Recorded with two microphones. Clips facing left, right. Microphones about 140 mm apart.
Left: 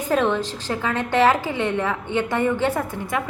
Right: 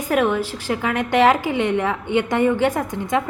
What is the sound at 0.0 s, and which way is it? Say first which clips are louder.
A woman's voice: right 1 dB; 10° right (ahead or behind).